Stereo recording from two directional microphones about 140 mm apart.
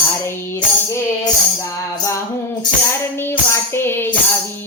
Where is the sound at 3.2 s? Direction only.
15° left (ahead or behind).